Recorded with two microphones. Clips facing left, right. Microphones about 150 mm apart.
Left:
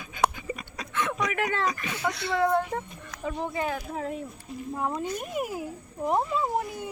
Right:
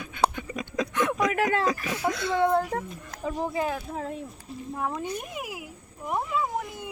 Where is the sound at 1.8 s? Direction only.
Centre (ahead or behind).